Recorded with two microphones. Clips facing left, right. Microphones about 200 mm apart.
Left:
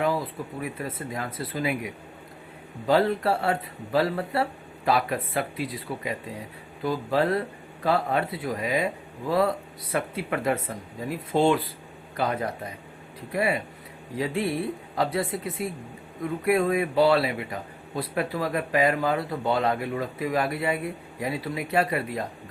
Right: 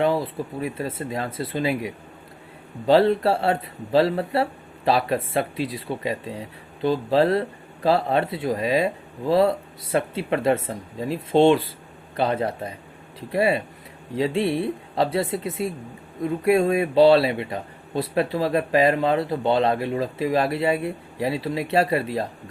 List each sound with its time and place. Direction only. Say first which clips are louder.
0.0 s speech: right 4 dB; 25° right (ahead or behind)